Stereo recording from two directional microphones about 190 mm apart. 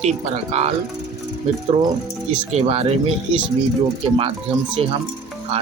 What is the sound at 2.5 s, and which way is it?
Speech, 35° right (ahead or behind).